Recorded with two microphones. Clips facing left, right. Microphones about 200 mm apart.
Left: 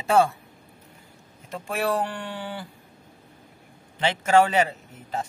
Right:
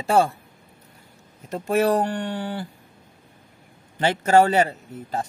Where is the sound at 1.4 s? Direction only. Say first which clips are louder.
Right 7 dB; 40° right (ahead or behind).